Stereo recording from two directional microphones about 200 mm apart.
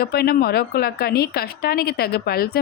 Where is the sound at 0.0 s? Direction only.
50° left (ahead or behind).